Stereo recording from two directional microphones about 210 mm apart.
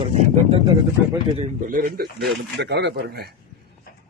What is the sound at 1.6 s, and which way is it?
A man's voice, 40° right (ahead or behind).